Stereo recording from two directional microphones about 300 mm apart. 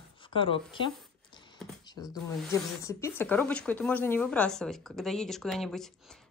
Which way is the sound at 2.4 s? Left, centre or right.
Centre.